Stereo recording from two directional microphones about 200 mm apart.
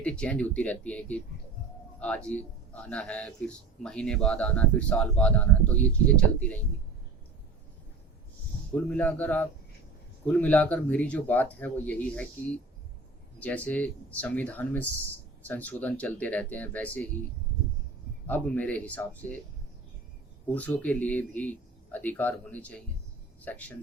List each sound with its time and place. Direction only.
0.0 s speech: 5° left (ahead or behind)
8.9 s speech: 10° left (ahead or behind)
13.4 s speech: 5° left (ahead or behind)
18.3 s speech: 10° left (ahead or behind)
20.5 s speech: 10° left (ahead or behind)